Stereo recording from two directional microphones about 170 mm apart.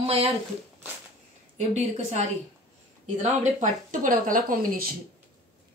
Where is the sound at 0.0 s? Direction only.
35° right (ahead or behind).